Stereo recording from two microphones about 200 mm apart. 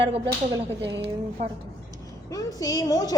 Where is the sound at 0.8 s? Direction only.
60° right (ahead or behind).